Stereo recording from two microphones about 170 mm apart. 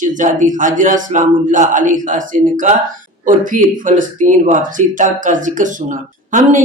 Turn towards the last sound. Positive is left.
turn(degrees=-50)  # may be behind; listen again after turning